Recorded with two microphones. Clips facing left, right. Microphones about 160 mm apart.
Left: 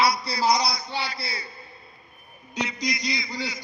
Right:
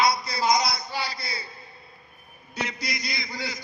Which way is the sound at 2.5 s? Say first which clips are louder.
Left 3 dB; 15° left (ahead or behind).